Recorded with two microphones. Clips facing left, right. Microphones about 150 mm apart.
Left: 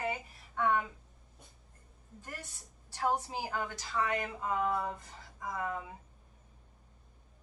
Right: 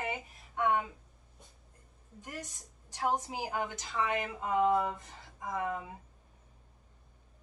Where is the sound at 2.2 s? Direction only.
15° right (ahead or behind).